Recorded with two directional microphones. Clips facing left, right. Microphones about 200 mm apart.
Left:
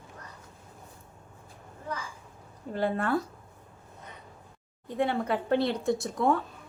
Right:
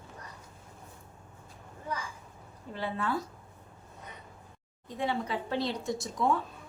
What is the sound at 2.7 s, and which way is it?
Speech, 50° left (ahead or behind).